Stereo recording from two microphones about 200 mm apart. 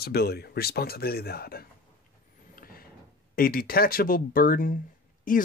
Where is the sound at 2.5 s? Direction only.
45° left (ahead or behind).